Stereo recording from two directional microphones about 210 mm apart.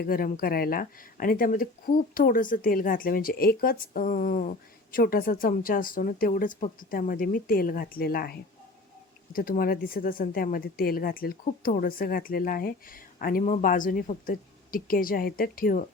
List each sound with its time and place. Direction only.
0.0 s speech: 45° left (ahead or behind)